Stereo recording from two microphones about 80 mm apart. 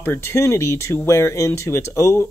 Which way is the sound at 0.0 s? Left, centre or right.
Left.